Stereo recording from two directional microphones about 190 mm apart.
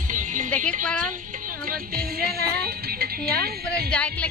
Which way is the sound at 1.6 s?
50° right (ahead or behind).